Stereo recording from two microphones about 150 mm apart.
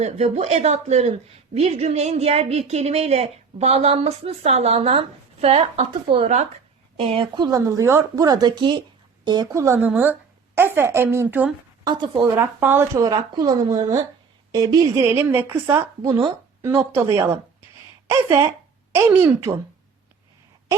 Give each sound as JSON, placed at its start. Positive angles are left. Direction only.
{"t": 0.0, "sound": "a woman's voice", "side_deg": -50}
{"t": 11.9, "sound": "a woman's voice", "side_deg": -30}
{"t": 12.5, "sound": "a woman's voice", "side_deg": -15}